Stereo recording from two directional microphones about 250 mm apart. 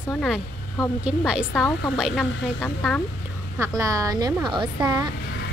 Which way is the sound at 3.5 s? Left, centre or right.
Centre.